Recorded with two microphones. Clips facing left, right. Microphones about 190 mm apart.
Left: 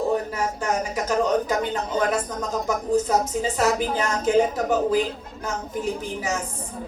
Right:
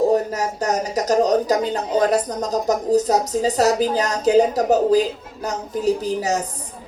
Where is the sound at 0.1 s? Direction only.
40° right (ahead or behind).